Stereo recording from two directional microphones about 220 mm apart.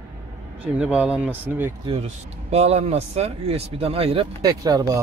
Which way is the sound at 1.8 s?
25° right (ahead or behind).